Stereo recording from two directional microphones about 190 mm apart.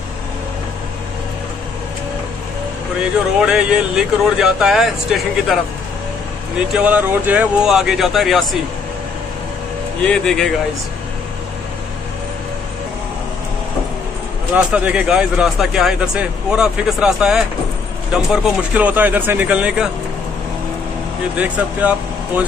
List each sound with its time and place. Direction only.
3.0 s speech: 5° right (ahead or behind)
6.7 s speech: 5° right (ahead or behind)
10.0 s speech: 5° left (ahead or behind)
14.5 s speech: 5° right (ahead or behind)
21.4 s speech: 10° right (ahead or behind)